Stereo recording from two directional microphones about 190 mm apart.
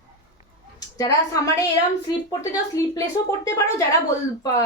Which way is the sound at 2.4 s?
15° left (ahead or behind).